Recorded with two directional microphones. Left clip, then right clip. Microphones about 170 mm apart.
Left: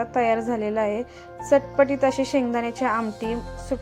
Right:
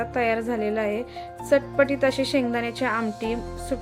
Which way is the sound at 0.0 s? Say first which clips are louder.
Left 2 dB; 5° left (ahead or behind).